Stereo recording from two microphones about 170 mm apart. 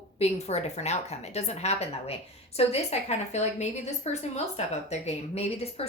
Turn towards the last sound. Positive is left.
turn(degrees=35)  # may be behind; listen again after turning